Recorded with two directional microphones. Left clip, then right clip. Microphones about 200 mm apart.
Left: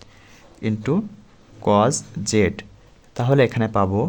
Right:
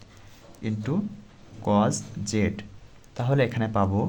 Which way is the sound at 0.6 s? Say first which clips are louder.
Left 7 dB; 30° left (ahead or behind).